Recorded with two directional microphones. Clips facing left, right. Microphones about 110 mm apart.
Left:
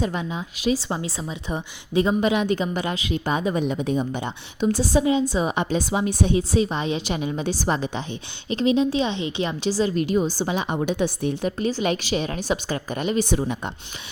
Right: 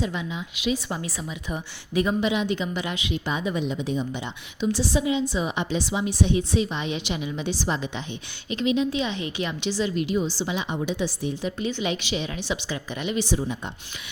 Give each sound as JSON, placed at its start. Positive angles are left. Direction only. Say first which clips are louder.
{"t": 0.0, "sound": "a woman's voice", "louder": "left 3 dB", "side_deg": 45}
{"t": 2.2, "sound": "a woman's voice", "louder": "left 3 dB", "side_deg": 50}
{"t": 8.4, "sound": "a woman's voice", "louder": "left 3 dB", "side_deg": 35}
{"t": 13.3, "sound": "speech", "louder": "left 3 dB", "side_deg": 65}